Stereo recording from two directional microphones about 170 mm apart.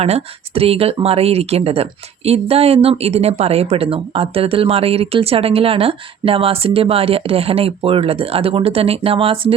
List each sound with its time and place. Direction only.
0.0 s speech: 35° right (ahead or behind)